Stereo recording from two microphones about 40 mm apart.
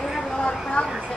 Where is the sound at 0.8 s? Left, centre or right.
Left.